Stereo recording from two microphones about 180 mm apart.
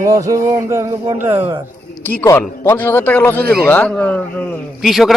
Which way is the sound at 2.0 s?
15° left (ahead or behind).